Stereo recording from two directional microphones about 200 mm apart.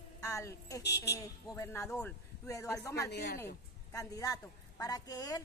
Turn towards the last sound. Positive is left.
turn(degrees=15)  # may be behind; listen again after turning